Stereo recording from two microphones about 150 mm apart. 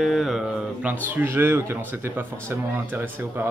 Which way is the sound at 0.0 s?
Centre (ahead or behind).